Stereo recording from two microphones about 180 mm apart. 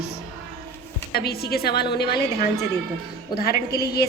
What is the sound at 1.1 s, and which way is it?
A woman's voice, 60° left (ahead or behind).